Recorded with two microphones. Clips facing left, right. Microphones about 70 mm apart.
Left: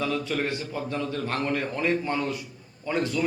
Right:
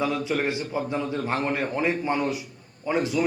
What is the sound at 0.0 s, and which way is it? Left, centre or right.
A man's voice, centre.